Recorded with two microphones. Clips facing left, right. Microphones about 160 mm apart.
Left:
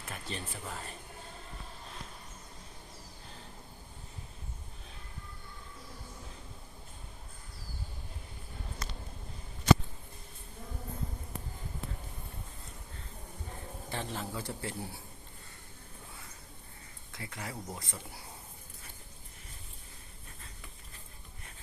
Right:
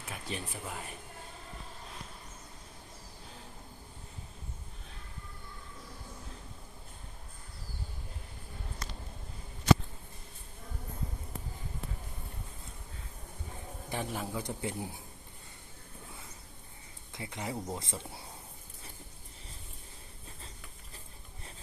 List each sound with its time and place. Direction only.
0.0 s speech: 10° right (ahead or behind)
13.9 s a man's voice: 10° right (ahead or behind)
17.1 s speech: 20° right (ahead or behind)